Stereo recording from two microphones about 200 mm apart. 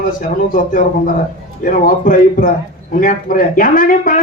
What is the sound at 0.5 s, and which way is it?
Speech, 45° left (ahead or behind).